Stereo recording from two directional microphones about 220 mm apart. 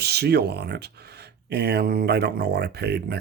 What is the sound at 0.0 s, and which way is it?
Speech, 50° right (ahead or behind).